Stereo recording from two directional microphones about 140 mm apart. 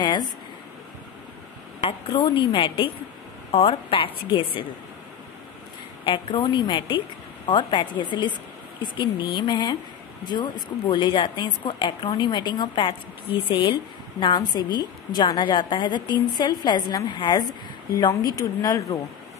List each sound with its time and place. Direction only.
0.0 s speech: 30° left (ahead or behind)
1.8 s a woman's voice: 40° left (ahead or behind)
6.0 s a woman's voice: 35° left (ahead or behind)